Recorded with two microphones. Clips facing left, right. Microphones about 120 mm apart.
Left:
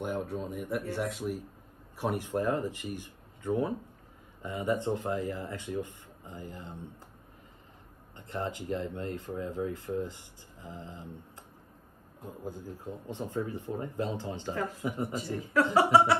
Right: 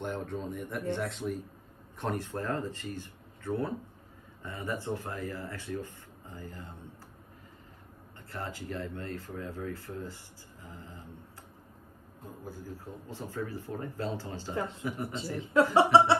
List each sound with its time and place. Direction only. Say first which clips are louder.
0.0 s speech: left 2 dB; 10° left (ahead or behind)
8.3 s speech: left 5 dB; 20° left (ahead or behind)
12.4 s speech: left 3 dB; 20° left (ahead or behind)
14.5 s a sound: even; 25° right (ahead or behind)
14.8 s speech: left 2 dB; 25° left (ahead or behind)
15.3 s a sound: right 2 dB; 25° right (ahead or behind)